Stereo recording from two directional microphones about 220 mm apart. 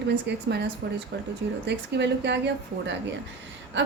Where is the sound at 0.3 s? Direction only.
50° right (ahead or behind).